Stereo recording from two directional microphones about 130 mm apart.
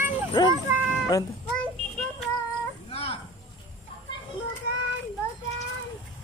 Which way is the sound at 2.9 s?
50° left (ahead or behind).